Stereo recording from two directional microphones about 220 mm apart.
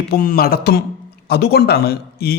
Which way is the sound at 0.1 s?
40° left (ahead or behind).